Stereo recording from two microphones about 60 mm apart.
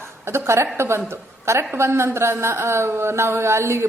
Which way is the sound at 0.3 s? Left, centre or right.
Right.